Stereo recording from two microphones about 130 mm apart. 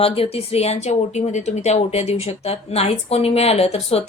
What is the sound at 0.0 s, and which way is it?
A woman's voice, 50° left (ahead or behind).